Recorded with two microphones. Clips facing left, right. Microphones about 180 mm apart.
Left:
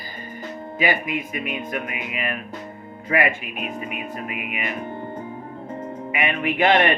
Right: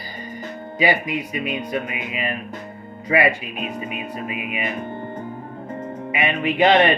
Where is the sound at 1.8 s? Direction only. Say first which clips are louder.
Right 2 dB; 25° right (ahead or behind).